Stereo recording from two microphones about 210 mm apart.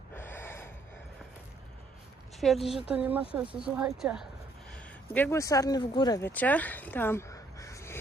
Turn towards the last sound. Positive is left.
turn(degrees=15)  # may be behind; listen again after turning